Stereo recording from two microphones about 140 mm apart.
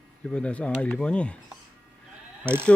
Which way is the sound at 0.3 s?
10° left (ahead or behind).